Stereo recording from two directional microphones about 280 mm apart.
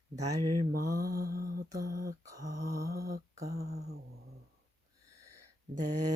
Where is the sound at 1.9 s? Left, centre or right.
Right.